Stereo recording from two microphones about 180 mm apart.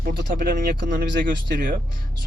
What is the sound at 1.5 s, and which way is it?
Speech, 50° right (ahead or behind).